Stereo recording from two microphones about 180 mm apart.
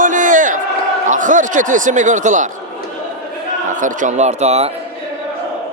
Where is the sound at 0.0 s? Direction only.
45° right (ahead or behind).